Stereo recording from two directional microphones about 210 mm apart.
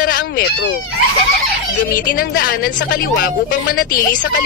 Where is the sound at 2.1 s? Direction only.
40° left (ahead or behind).